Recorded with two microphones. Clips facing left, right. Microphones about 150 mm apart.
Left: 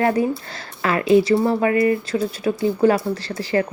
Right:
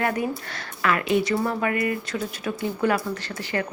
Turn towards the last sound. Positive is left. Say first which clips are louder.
# left 7 dB
turn(degrees=35)  # may be behind; listen again after turning